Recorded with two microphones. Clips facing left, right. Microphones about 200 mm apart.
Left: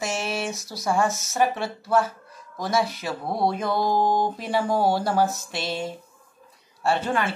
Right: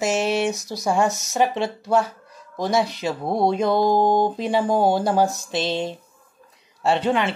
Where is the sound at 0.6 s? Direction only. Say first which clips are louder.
Right 3 dB; 15° right (ahead or behind).